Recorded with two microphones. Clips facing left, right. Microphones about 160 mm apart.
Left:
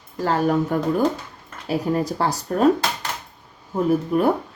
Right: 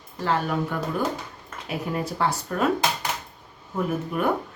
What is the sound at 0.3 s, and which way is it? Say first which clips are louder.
Speech: left 5 dB; 40° left (ahead or behind).